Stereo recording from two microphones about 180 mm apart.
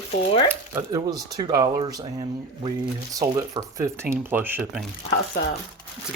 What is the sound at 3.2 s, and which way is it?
Speech, 15° right (ahead or behind).